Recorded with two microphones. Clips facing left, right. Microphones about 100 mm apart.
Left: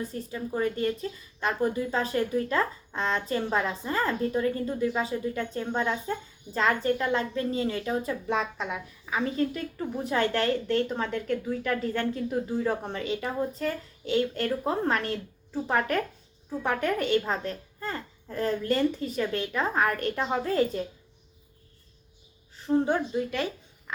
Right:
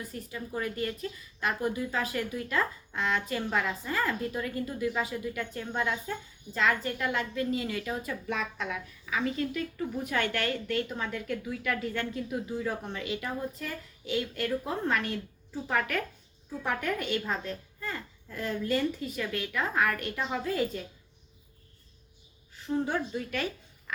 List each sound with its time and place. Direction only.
0.0 s a woman's voice: 30° left (ahead or behind)
17.4 s speech: 40° left (ahead or behind)
23.1 s a woman's voice: 20° left (ahead or behind)